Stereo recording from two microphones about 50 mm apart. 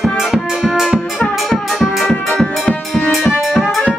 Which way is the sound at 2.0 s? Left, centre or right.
Centre.